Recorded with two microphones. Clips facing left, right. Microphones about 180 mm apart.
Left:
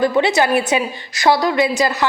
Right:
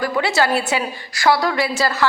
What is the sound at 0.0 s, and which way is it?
A woman's voice, 20° left (ahead or behind).